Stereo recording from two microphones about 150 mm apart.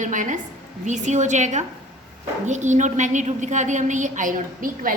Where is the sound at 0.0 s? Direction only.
60° right (ahead or behind).